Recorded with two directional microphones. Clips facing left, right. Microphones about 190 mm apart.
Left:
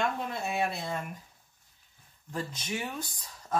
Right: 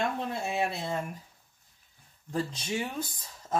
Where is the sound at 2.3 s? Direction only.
25° right (ahead or behind).